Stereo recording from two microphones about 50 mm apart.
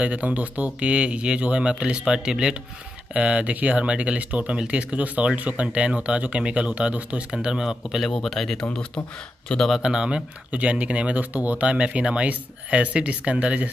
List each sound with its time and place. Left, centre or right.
0.0 s speech: right
7.2 s speech: centre
8.2 s speech: centre
8.6 s speech: left
9.8 s speech: centre